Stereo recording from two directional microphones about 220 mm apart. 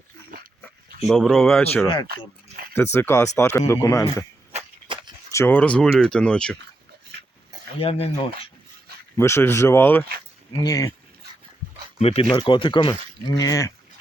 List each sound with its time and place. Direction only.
1.0 s speech: centre (ahead or behind)
2.1 s speech: 45° right (ahead or behind)
2.7 s speech: 10° left (ahead or behind)
4.5 s a sound: 20° right (ahead or behind)
5.3 s speech: 10° left (ahead or behind)
7.8 s speech: 25° left (ahead or behind)
9.1 s speech: 10° left (ahead or behind)
11.9 s speech: 25° left (ahead or behind)